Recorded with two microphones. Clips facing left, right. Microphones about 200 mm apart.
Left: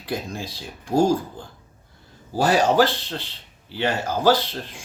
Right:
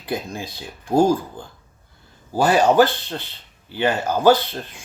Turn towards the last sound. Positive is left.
turn(degrees=-55)  # may be behind; listen again after turning